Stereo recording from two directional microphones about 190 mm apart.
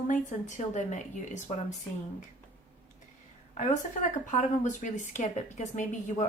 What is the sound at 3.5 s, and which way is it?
A woman's voice, 40° left (ahead or behind).